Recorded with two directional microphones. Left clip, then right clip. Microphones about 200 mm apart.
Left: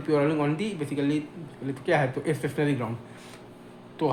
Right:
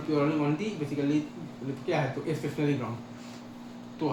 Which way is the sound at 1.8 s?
30° left (ahead or behind).